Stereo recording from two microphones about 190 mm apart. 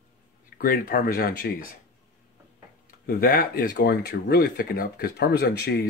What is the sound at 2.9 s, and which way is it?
Speech, 50° left (ahead or behind).